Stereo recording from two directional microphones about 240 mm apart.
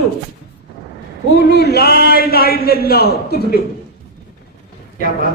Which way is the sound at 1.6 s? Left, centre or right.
Left.